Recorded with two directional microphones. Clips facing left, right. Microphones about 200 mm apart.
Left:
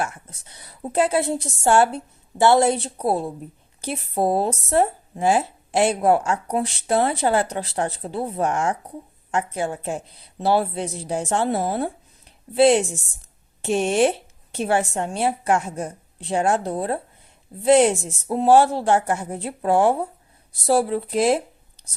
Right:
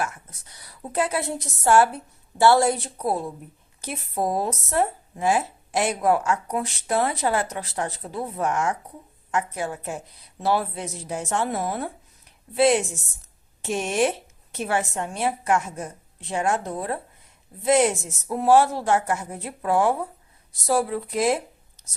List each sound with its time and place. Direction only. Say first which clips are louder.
0.0 s speech: left 2 dB; 25° left (ahead or behind)